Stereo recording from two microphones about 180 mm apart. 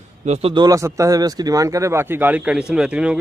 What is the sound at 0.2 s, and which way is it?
Speech, 35° right (ahead or behind).